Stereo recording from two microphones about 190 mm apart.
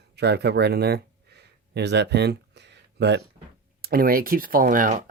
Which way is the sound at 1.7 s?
65° right (ahead or behind).